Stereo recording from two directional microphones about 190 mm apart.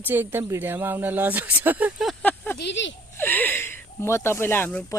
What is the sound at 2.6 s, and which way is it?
Speech, 70° left (ahead or behind).